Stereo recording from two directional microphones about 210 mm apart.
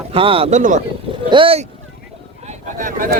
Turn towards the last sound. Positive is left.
turn(degrees=-40)  # may be behind; listen again after turning